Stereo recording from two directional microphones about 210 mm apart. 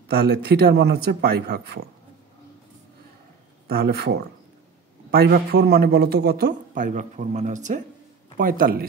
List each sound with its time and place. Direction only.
0.1 s a man's voice: 50° right (ahead or behind)
3.6 s a man's voice: 50° right (ahead or behind)